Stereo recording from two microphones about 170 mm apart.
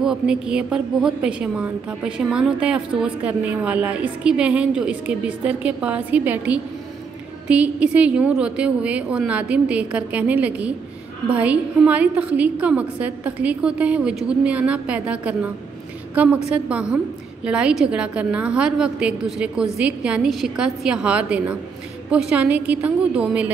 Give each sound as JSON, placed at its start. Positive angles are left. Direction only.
{"t": 0.0, "sound": "a woman's voice", "side_deg": -5}